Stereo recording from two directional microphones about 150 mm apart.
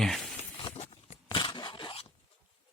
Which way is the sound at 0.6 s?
40° left (ahead or behind).